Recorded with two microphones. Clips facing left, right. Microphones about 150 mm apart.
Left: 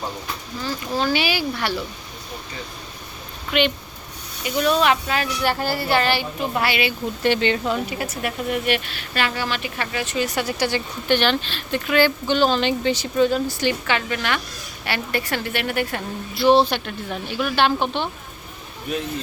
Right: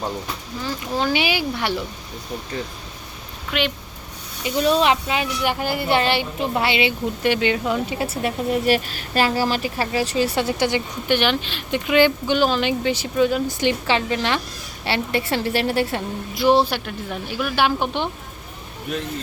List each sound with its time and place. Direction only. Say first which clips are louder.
0.6 s speech: even; 20° right (ahead or behind)
3.5 s speech: left 3 dB; centre (ahead or behind)
4.4 s speech: right 1 dB; 30° right (ahead or behind)
7.2 s a woman's voice: left 1 dB; 10° right (ahead or behind)
7.9 s speech: right 3 dB; 25° right (ahead or behind); by 13.4 s 10° right (ahead or behind)
13.5 s speech: right 2 dB; 20° right (ahead or behind)
16.3 s a woman's voice: left 1 dB; 10° right (ahead or behind)